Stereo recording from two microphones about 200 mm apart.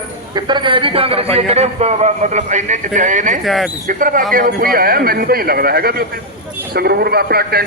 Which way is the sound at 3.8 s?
45° right (ahead or behind).